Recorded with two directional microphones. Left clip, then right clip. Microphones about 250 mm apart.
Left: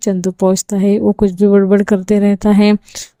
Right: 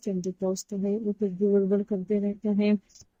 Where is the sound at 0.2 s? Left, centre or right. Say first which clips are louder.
Left 16 dB; left.